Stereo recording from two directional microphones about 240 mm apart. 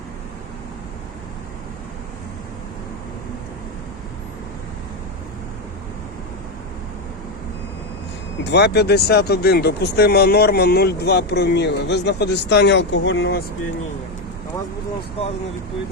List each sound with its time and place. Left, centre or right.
8.4 s speech: left
15.2 s speech: left